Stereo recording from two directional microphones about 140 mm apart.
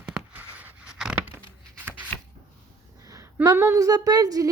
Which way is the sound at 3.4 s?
20° right (ahead or behind).